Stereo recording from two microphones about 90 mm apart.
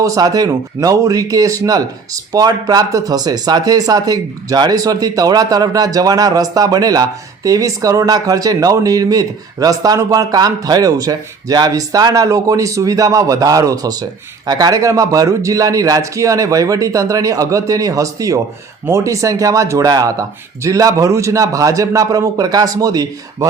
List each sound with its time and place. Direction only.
0.0 s speech: 40° right (ahead or behind)